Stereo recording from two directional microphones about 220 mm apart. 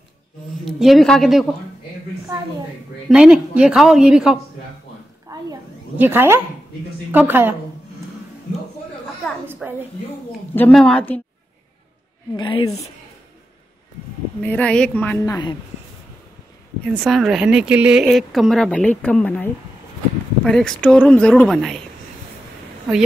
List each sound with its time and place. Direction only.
0.7 s speech: centre (ahead or behind)
3.1 s speech: 5° right (ahead or behind)
5.3 s a sound: 10° right (ahead or behind)
7.1 s a woman's voice: 10° right (ahead or behind)
9.5 s a sound: 10° right (ahead or behind)
10.5 s speech: 5° left (ahead or behind)
12.4 s a woman's voice: 20° left (ahead or behind)
14.4 s a woman's voice: 5° left (ahead or behind)
17.0 s speech: centre (ahead or behind)